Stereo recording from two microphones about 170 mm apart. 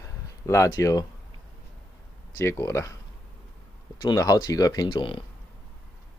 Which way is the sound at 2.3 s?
15° left (ahead or behind).